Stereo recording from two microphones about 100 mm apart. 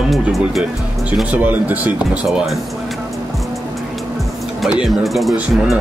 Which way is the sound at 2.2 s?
Centre (ahead or behind).